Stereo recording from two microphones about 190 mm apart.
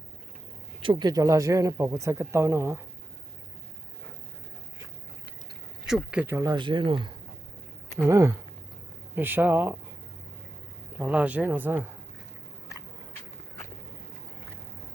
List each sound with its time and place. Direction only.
0.8 s speech: 25° right (ahead or behind)
6.1 s speech: 10° right (ahead or behind)
10.9 s speech: 5° right (ahead or behind)